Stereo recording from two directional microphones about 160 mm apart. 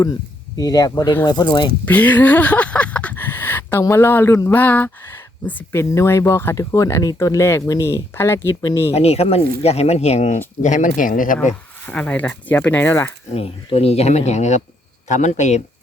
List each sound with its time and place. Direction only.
0.5 s speech: 25° left (ahead or behind)
1.8 s speech: 10° left (ahead or behind)
8.9 s speech: 40° left (ahead or behind); by 11.3 s 55° left (ahead or behind)
11.9 s speech: 10° left (ahead or behind)
13.3 s speech: 40° left (ahead or behind)